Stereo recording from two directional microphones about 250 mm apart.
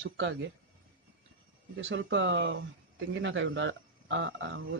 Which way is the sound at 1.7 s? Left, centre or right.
Right.